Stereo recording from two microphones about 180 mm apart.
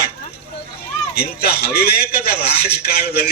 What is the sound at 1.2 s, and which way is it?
A man's voice, 65° left (ahead or behind).